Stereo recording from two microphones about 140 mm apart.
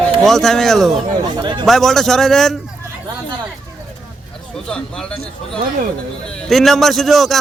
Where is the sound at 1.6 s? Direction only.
Centre (ahead or behind).